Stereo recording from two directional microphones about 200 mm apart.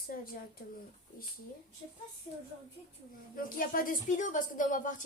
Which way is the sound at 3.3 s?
45° left (ahead or behind).